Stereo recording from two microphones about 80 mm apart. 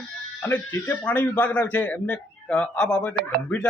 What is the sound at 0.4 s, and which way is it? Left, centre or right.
A man's voice, left.